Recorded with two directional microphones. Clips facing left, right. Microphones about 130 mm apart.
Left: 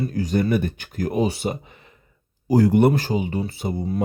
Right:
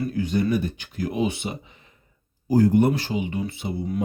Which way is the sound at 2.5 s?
80° left.